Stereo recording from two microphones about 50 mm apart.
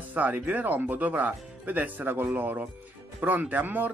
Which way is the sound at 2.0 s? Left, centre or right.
Right.